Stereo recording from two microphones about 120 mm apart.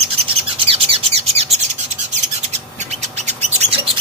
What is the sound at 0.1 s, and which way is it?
Bird, 50° right (ahead or behind).